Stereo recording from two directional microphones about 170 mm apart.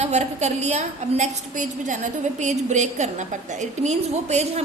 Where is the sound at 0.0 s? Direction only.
40° right (ahead or behind).